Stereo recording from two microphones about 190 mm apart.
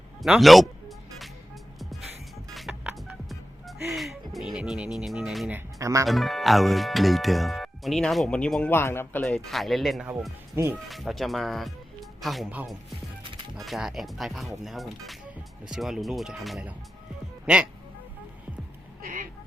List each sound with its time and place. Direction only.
0.2 s music: centre (ahead or behind)
5.5 s speech: 15° right (ahead or behind)
6.1 s speech: centre (ahead or behind)
10.8 s speech: centre (ahead or behind)
19.0 s fowl: 45° right (ahead or behind)